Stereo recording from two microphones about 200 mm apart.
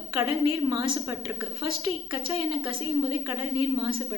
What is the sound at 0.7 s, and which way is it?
A woman's voice, 20° right (ahead or behind).